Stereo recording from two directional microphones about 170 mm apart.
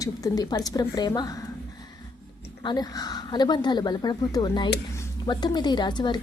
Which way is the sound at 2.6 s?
25° left (ahead or behind).